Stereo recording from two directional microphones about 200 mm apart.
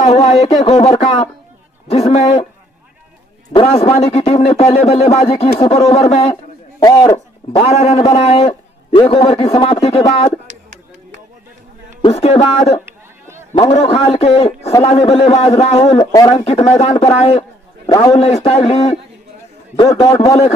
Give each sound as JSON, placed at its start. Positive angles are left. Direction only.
{"t": 0.0, "sound": "a man's voice", "side_deg": 30}
{"t": 3.5, "sound": "a man's voice", "side_deg": 25}
{"t": 6.8, "sound": "speech", "side_deg": 20}
{"t": 7.6, "sound": "a man's voice", "side_deg": 30}
{"t": 12.0, "sound": "a man's voice", "side_deg": 30}
{"t": 18.1, "sound": "a man's voice", "side_deg": 30}